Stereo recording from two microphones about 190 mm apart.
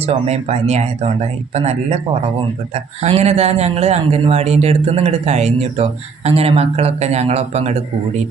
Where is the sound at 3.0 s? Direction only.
35° right (ahead or behind).